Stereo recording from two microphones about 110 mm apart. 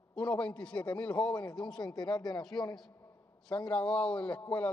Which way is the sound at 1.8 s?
40° left (ahead or behind).